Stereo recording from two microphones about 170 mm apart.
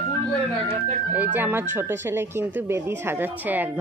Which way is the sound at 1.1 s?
10° right (ahead or behind).